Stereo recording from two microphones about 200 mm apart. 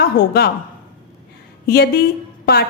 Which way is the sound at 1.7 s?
50° left (ahead or behind).